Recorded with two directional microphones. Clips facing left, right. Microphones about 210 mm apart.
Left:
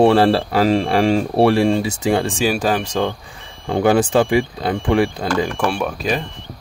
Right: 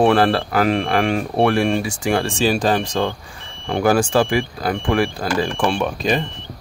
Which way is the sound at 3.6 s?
20° left (ahead or behind).